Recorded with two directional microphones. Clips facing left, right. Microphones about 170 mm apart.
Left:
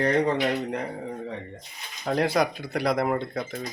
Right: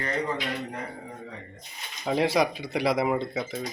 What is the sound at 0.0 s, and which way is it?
Speech, 70° left (ahead or behind).